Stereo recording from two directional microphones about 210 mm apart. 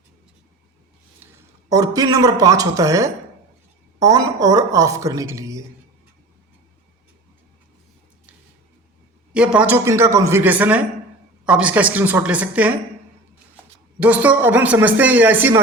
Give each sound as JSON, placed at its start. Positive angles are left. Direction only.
{"t": 1.7, "sound": "a woman's voice", "side_deg": -15}
{"t": 9.3, "sound": "a woman's voice", "side_deg": -5}
{"t": 14.0, "sound": "a woman's voice", "side_deg": -5}